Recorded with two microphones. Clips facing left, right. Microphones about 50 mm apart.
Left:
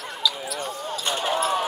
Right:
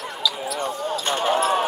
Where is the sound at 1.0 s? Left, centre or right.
Right.